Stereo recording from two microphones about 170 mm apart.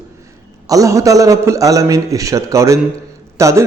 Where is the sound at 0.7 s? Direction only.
20° right (ahead or behind).